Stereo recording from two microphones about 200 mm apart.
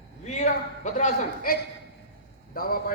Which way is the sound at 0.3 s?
35° left (ahead or behind).